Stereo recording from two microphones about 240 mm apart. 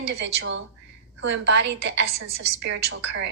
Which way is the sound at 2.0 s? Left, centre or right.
Right.